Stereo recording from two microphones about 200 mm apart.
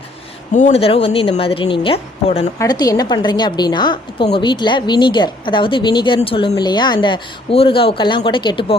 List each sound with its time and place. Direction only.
0.5 s a woman's voice: 35° left (ahead or behind)